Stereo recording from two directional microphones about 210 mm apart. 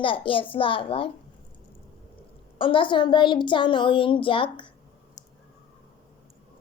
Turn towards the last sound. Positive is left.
turn(degrees=25)  # may be behind; listen again after turning